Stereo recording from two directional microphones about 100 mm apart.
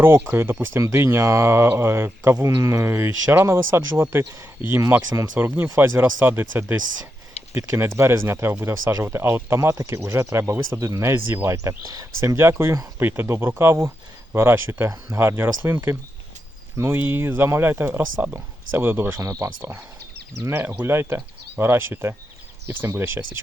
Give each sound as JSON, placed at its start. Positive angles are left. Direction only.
{"t": 0.0, "sound": "speech", "side_deg": -25}
{"t": 19.2, "sound": "speech", "side_deg": -35}